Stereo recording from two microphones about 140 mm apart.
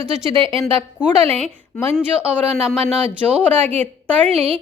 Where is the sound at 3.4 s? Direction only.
10° left (ahead or behind).